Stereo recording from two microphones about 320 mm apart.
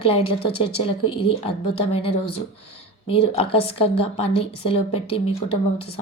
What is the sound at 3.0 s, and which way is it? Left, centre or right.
Speech, centre.